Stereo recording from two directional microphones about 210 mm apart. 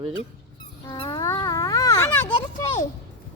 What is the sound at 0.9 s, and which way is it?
Insect, 20° left (ahead or behind).